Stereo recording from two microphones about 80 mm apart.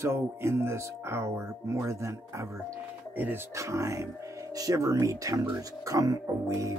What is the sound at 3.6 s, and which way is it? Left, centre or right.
Speech, right.